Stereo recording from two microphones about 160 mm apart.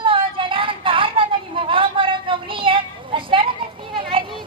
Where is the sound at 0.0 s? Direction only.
30° right (ahead or behind).